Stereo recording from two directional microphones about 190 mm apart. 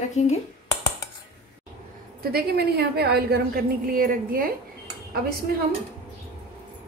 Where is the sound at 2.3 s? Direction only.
55° right (ahead or behind).